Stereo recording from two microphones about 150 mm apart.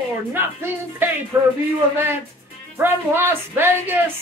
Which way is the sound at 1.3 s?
20° right (ahead or behind).